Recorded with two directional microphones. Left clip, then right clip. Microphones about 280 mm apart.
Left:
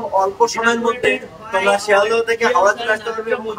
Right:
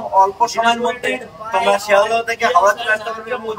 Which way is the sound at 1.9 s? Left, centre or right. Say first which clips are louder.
Even; centre.